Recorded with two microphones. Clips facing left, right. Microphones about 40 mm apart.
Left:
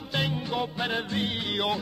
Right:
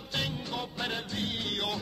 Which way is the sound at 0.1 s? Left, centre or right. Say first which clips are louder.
Left 5 dB; centre.